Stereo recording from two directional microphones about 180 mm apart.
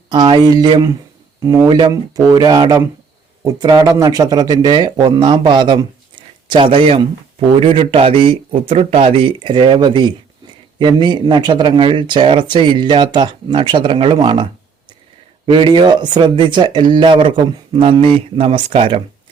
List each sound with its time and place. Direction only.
0.1 s speech: 25° right (ahead or behind)